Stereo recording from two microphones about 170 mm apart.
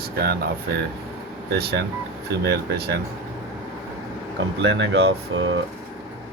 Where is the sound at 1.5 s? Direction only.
80° right.